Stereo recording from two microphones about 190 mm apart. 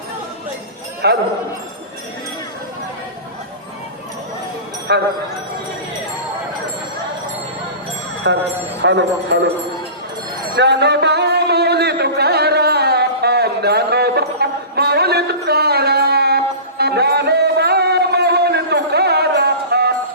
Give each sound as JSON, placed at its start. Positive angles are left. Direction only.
{"t": 1.0, "sound": "speech", "side_deg": -60}
{"t": 4.9, "sound": "speech", "side_deg": -65}
{"t": 8.8, "sound": "speech", "side_deg": -65}
{"t": 10.5, "sound": "music", "side_deg": -65}